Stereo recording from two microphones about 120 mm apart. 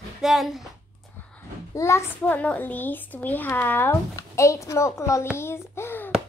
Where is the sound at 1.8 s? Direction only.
20° left (ahead or behind).